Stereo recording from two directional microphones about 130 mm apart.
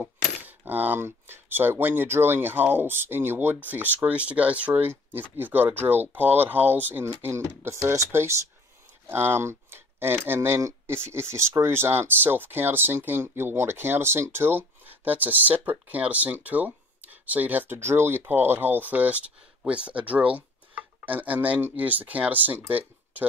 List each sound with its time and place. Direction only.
0.4 s speech: 15° right (ahead or behind)